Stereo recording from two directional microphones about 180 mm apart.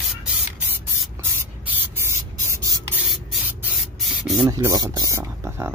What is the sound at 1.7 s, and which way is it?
Spray, 15° right (ahead or behind).